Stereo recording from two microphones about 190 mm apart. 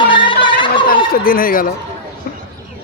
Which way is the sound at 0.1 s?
25° left (ahead or behind).